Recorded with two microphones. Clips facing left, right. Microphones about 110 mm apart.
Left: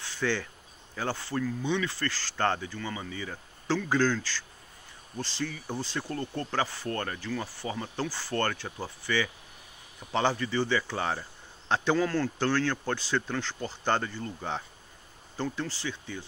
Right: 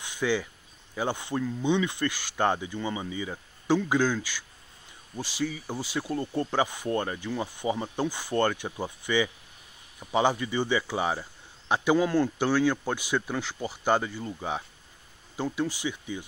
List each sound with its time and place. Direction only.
0.0 s insect: 15° right (ahead or behind)
0.9 s speech: 15° right (ahead or behind)